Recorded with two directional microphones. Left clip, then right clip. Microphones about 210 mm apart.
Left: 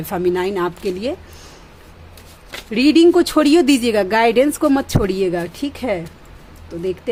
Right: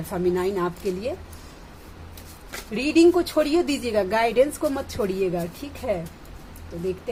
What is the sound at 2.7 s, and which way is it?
A woman's voice, 45° left (ahead or behind).